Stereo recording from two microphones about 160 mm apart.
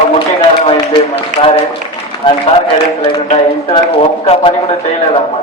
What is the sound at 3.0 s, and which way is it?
A man's voice, 35° left (ahead or behind).